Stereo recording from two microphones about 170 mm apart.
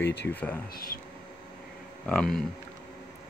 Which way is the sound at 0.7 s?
60° left (ahead or behind).